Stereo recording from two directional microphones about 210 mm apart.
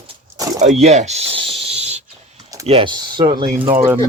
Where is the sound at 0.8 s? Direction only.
30° right (ahead or behind).